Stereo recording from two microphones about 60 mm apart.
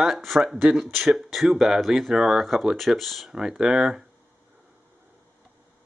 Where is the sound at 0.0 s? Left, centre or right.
Centre.